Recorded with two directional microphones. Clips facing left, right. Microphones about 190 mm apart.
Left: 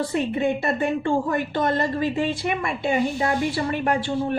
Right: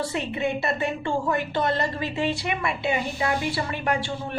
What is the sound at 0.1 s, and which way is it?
A woman's voice, 50° left (ahead or behind).